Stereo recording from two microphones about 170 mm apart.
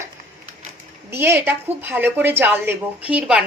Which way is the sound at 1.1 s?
15° right (ahead or behind).